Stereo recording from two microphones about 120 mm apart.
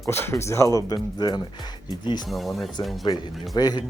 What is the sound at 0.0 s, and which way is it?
Speech, 20° left (ahead or behind).